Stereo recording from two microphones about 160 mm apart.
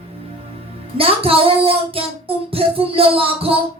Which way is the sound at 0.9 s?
35° right (ahead or behind).